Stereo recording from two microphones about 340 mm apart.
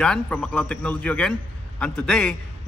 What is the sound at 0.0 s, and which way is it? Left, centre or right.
A man's voice, centre.